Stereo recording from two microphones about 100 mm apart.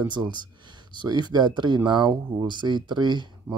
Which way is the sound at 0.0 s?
50° right (ahead or behind).